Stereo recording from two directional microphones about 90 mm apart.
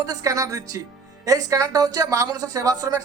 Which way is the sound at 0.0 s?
45° right (ahead or behind).